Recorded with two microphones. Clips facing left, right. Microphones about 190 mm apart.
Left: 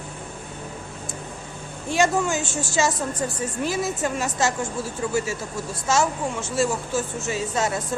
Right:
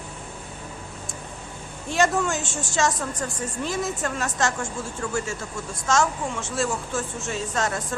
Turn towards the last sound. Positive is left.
turn(degrees=5)  # may be behind; listen again after turning